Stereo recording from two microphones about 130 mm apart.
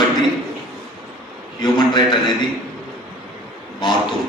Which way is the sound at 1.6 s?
35° left (ahead or behind).